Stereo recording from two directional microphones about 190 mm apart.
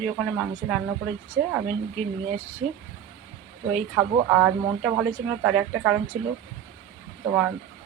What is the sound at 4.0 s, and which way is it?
Speech, 5° right (ahead or behind).